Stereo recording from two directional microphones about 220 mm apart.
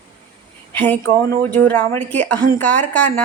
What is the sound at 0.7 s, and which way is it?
A woman's voice, 5° left (ahead or behind).